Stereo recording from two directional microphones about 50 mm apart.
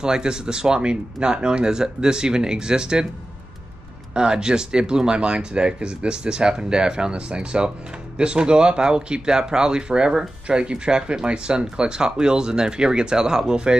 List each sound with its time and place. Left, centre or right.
0.0 s speech: centre
4.1 s speech: centre